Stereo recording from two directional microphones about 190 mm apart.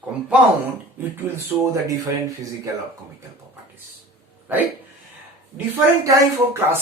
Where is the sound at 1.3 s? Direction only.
10° right (ahead or behind).